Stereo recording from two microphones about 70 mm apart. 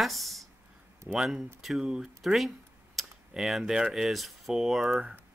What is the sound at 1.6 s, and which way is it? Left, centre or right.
Speech, centre.